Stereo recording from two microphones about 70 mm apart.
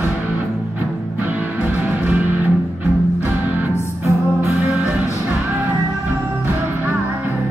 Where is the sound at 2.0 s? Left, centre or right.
Right.